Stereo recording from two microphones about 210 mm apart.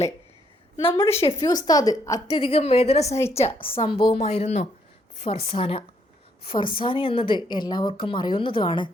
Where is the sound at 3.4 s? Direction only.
25° left (ahead or behind).